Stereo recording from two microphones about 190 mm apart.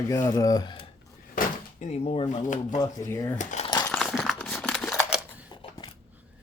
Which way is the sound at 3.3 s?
40° left (ahead or behind).